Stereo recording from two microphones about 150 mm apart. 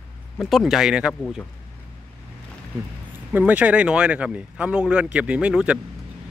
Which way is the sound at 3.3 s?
10° right (ahead or behind).